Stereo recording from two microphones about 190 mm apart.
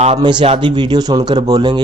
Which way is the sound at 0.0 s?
25° right (ahead or behind).